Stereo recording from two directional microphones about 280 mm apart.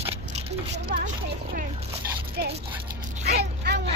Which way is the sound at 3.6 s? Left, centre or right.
Right.